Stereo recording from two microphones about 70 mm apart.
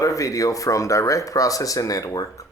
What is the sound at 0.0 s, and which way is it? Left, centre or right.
Speech, left.